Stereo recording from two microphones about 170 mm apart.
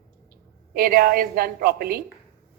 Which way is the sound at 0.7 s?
60° right (ahead or behind).